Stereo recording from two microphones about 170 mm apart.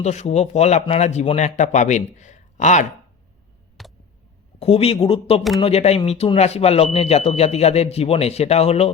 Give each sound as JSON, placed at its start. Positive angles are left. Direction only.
{"t": 0.0, "sound": "speech", "side_deg": 40}
{"t": 3.8, "sound": "a sound", "side_deg": 0}
{"t": 4.6, "sound": "speech", "side_deg": 35}